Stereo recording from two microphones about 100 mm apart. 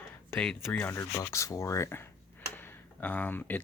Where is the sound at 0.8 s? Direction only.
25° left (ahead or behind).